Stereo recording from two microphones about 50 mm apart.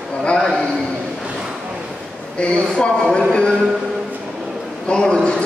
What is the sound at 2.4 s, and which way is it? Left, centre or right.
A man's voice, centre.